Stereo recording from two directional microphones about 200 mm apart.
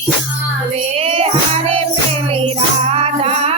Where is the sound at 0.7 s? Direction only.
30° right (ahead or behind).